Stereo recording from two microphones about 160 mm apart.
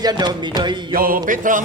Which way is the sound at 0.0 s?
25° right (ahead or behind).